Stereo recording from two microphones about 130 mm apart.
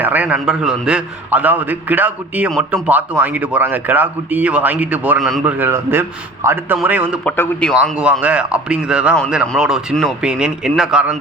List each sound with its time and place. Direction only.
0.0 s speech: 15° right (ahead or behind)
7.3 s a man's voice: 10° left (ahead or behind)
7.7 s a man's voice: 5° right (ahead or behind)